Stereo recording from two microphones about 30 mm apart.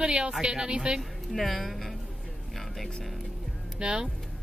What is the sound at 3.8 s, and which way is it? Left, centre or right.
Speech, right.